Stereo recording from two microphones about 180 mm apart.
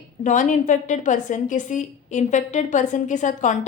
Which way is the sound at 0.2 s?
45° left (ahead or behind).